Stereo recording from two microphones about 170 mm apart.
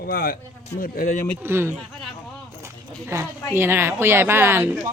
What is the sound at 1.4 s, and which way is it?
Speech, 15° right (ahead or behind).